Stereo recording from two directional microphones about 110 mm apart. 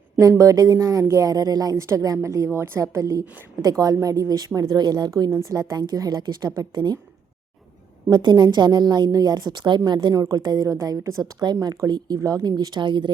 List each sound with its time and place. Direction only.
0.2 s speech: 30° right (ahead or behind)
5.3 s speech: 30° right (ahead or behind)
8.1 s speech: 40° right (ahead or behind)